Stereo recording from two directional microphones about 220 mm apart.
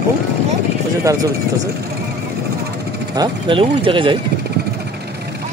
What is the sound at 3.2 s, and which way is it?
Speech, 25° right (ahead or behind).